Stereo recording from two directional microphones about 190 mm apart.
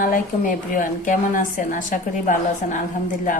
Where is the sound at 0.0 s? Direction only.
45° left (ahead or behind).